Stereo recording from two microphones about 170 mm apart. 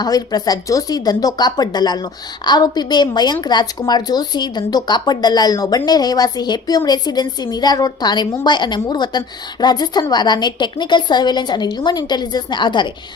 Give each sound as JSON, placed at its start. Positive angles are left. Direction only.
{"t": 0.0, "sound": "speech", "side_deg": 25}